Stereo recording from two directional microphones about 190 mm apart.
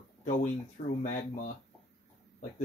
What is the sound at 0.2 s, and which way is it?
Speech, 40° left (ahead or behind).